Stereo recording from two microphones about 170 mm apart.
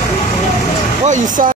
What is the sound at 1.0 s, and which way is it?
Speech, 50° right (ahead or behind).